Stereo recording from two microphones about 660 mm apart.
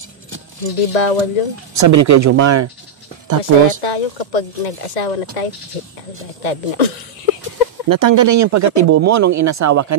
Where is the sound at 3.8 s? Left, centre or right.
Left.